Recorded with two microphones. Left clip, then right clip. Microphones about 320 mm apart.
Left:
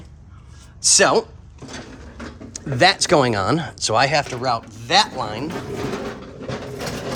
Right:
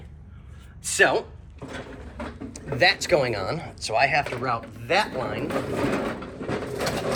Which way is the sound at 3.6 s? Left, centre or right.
Left.